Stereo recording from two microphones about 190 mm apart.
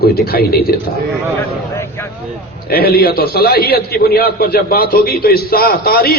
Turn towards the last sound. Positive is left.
turn(degrees=55)  # may be behind; listen again after turning